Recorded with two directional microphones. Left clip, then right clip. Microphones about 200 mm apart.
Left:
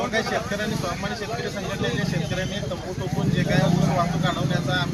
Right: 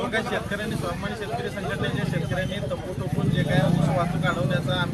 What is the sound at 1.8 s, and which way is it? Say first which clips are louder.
Speech: left 2 dB; 5° right (ahead or behind).